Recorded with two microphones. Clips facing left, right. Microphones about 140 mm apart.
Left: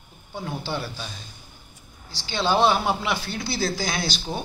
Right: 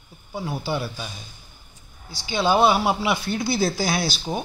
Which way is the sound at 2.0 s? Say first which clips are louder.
Right 3 dB; 10° right (ahead or behind).